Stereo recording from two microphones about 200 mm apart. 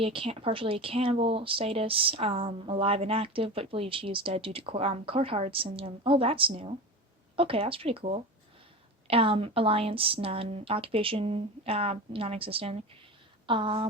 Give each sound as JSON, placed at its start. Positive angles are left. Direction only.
{"t": 0.0, "sound": "speech", "side_deg": -30}